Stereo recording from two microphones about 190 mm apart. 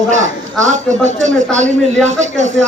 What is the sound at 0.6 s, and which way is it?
A man's voice, 40° right (ahead or behind).